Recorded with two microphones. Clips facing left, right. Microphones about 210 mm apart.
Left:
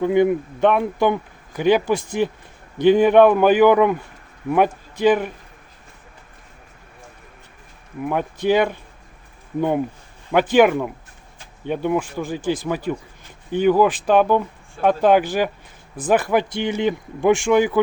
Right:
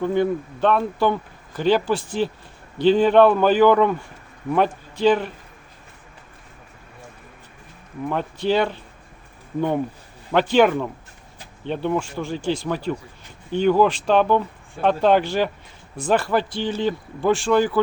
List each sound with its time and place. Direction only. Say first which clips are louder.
0.0 s speech: left 4 dB; 15° left (ahead or behind)
8.0 s speech: left 3 dB; 10° left (ahead or behind)